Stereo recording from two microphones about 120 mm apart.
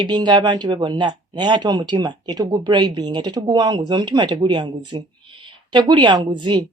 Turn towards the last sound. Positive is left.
turn(degrees=-40)  # may be behind; listen again after turning